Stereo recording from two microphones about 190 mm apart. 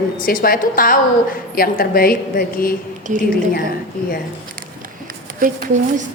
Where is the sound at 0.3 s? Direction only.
50° left (ahead or behind).